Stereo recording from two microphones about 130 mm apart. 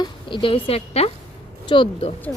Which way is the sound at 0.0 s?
40° left (ahead or behind).